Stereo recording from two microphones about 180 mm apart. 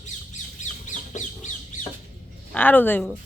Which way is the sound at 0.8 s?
45° left (ahead or behind).